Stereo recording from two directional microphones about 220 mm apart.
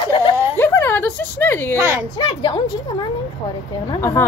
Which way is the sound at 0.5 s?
10° left (ahead or behind).